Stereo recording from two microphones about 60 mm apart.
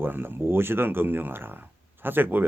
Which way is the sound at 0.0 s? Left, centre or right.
Right.